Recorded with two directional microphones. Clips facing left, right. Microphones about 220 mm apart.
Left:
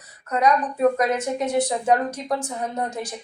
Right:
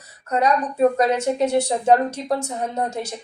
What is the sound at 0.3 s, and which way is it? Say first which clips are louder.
A woman's voice: even; 30° right (ahead or behind).